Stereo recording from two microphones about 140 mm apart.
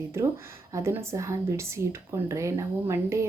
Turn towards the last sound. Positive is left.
turn(degrees=-20)  # may be behind; listen again after turning